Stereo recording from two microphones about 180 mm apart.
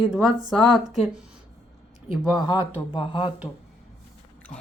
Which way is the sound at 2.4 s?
25° left (ahead or behind).